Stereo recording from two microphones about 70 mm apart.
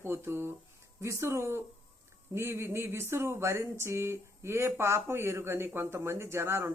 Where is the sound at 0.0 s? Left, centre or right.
Right.